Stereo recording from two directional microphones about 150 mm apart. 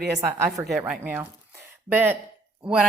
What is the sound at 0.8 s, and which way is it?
Speech, 10° right (ahead or behind).